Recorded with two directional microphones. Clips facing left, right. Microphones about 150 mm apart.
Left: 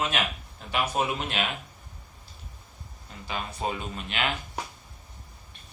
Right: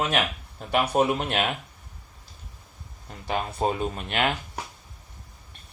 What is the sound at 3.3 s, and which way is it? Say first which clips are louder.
Speech: right 6 dB; 55° right (ahead or behind).